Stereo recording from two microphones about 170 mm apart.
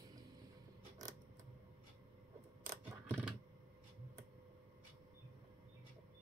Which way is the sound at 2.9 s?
15° right (ahead or behind).